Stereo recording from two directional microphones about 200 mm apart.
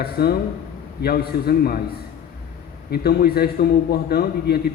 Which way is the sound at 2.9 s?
50° left (ahead or behind).